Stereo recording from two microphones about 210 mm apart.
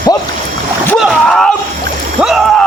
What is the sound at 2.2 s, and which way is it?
Rowboat, centre (ahead or behind).